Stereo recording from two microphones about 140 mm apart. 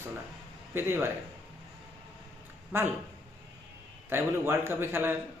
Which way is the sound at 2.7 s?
15° right (ahead or behind).